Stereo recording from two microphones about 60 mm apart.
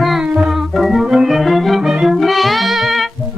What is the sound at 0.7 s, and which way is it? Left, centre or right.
Music, centre.